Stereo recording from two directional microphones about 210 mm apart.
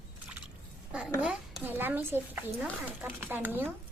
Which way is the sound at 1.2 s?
5° right (ahead or behind).